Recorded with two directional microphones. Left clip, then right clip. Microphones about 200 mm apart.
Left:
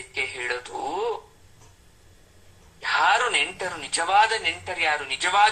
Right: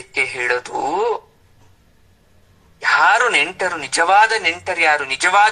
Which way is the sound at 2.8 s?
35° right (ahead or behind).